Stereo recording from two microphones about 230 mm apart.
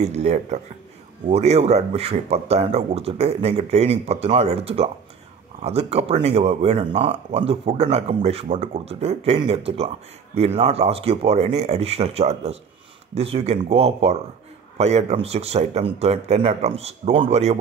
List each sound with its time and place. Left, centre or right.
0.0 s speech: right